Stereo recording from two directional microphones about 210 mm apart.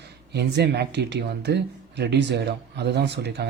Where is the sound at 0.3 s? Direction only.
50° right (ahead or behind).